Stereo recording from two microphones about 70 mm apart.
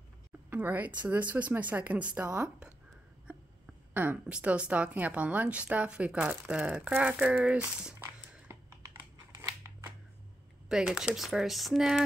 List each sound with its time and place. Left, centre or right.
0.5 s a woman's voice: right
3.9 s speech: right
4.3 s a woman's voice: centre
9.6 s shuffling cards: right
10.9 s speech: centre